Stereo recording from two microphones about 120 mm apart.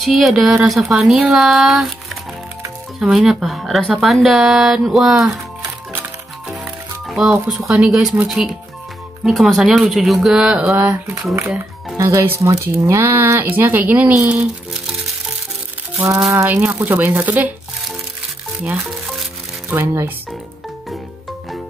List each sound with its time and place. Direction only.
0.0 s speech: centre (ahead or behind)
3.0 s speech: 5° right (ahead or behind)
6.5 s speech: 5° right (ahead or behind)
12.0 s speech: 20° right (ahead or behind)
16.4 s speech: 15° right (ahead or behind)
18.9 s music: centre (ahead or behind)
19.7 s speech: 20° right (ahead or behind)